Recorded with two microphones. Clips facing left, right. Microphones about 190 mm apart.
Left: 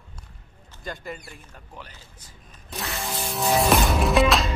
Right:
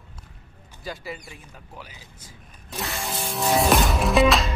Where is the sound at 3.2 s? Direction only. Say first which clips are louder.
Even; centre (ahead or behind).